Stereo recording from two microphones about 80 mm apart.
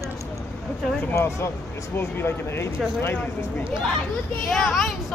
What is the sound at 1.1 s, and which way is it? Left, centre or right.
Speech, left.